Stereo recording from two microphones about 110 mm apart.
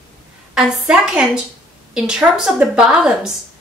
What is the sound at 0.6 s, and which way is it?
A woman's voice, 5° right (ahead or behind).